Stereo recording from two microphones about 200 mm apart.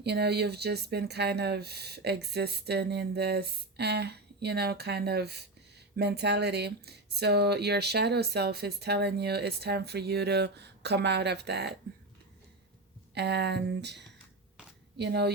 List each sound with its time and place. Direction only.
0.0 s speech: 55° right (ahead or behind)
13.1 s speech: 55° right (ahead or behind)